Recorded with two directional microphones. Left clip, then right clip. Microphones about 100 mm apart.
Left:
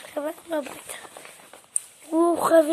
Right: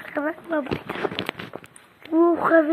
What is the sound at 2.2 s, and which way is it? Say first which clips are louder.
Speech: right 2 dB; 80° left.